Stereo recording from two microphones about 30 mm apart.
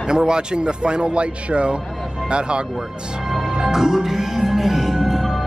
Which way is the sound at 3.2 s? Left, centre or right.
Centre.